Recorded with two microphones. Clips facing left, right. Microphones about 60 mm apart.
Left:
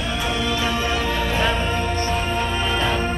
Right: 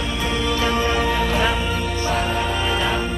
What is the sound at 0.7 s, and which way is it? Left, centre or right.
Music, right.